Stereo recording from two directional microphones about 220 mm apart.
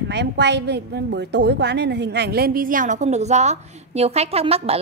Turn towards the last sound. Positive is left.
turn(degrees=-25)  # may be behind; listen again after turning